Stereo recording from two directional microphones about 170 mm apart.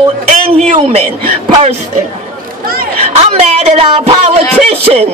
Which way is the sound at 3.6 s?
35° right (ahead or behind).